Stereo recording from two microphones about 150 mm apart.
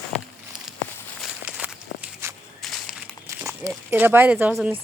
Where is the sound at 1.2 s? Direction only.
5° right (ahead or behind).